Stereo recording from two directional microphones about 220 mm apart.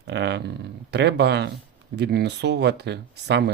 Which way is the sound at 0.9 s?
50° right (ahead or behind).